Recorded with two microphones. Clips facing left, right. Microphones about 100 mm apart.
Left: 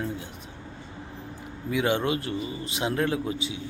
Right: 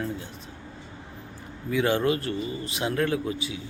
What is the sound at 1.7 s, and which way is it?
A man's voice, 15° left (ahead or behind).